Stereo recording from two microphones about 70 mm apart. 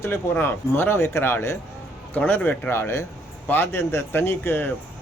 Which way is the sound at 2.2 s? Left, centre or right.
Left.